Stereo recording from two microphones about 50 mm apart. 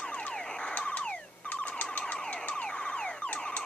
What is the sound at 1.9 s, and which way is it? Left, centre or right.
Emergency vehicle, left.